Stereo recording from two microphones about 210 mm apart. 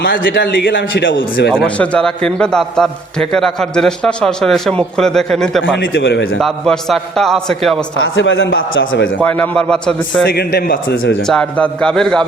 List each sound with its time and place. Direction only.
0.3 s a man's voice: 55° left (ahead or behind)
1.6 s a man's voice: 5° left (ahead or behind)
5.6 s a man's voice: 60° left (ahead or behind)
6.4 s a man's voice: centre (ahead or behind)
7.9 s a man's voice: 70° left (ahead or behind)
9.2 s a man's voice: 5° left (ahead or behind)
10.2 s a man's voice: 45° left (ahead or behind)
11.3 s a man's voice: 5° left (ahead or behind)